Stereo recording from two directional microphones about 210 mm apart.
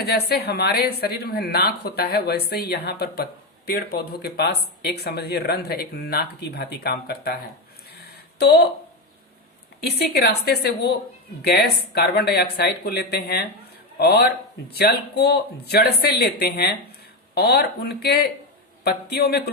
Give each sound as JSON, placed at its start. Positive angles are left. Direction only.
{"t": 0.0, "sound": "speech", "side_deg": 50}
{"t": 7.9, "sound": "a sound", "side_deg": 50}
{"t": 9.8, "sound": "speech", "side_deg": 50}